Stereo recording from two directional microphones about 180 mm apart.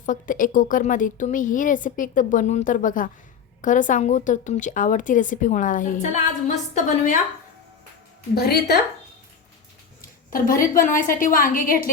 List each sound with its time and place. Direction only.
0.0 s a woman's voice: 45° left (ahead or behind)
8.4 s a woman's voice: 60° left (ahead or behind)
10.3 s a woman's voice: 50° left (ahead or behind)